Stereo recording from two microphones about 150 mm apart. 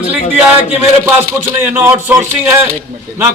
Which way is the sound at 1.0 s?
15° right (ahead or behind).